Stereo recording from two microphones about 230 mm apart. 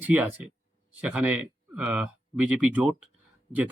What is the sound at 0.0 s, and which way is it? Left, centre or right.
Speech, centre.